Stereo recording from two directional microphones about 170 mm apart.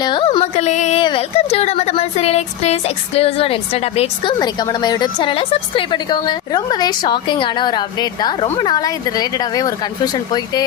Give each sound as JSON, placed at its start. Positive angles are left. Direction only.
{"t": 0.0, "sound": "music", "side_deg": 30}
{"t": 0.9, "sound": "speech", "side_deg": 30}